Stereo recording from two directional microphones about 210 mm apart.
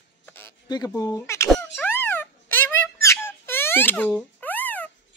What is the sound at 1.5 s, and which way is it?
Squeak, 5° left (ahead or behind).